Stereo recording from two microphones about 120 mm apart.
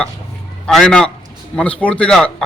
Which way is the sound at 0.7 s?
5° left (ahead or behind).